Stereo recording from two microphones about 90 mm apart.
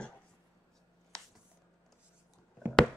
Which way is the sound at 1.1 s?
10° left (ahead or behind).